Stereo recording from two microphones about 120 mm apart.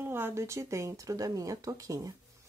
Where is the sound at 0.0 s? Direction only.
20° right (ahead or behind).